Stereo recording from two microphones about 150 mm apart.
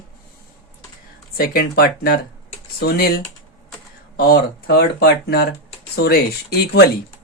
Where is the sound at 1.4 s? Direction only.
90° left.